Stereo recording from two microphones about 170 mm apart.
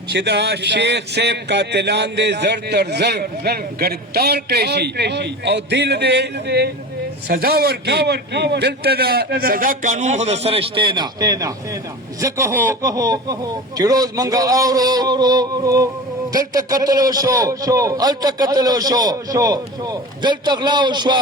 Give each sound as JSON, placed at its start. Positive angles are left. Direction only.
{"t": 0.1, "sound": "a man's voice", "side_deg": -75}
{"t": 7.3, "sound": "a man's voice", "side_deg": -65}